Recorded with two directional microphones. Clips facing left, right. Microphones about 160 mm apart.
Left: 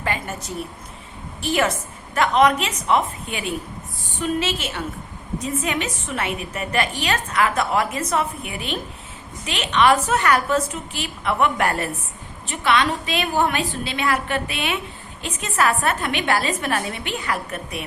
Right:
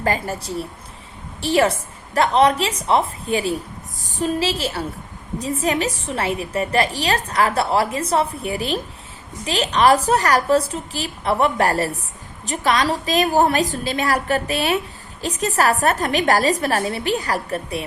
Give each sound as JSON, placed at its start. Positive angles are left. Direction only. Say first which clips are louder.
{"t": 0.0, "sound": "a woman's voice", "louder": "right 4 dB", "side_deg": -35}